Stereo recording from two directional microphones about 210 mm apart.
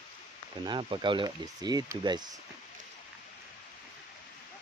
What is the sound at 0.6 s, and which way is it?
Speech, 20° right (ahead or behind).